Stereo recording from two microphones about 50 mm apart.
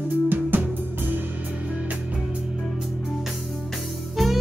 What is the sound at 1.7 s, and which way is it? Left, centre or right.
Music, right.